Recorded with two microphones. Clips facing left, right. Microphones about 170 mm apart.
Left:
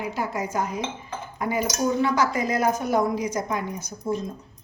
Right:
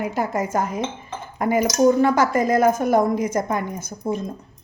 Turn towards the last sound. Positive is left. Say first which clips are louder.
# right 3 dB
turn(degrees=-50)  # may be behind; listen again after turning